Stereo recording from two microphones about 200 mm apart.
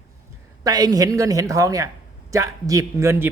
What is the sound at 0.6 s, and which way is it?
Speech, 20° right (ahead or behind).